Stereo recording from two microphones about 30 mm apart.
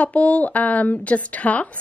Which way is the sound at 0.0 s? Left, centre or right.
Left.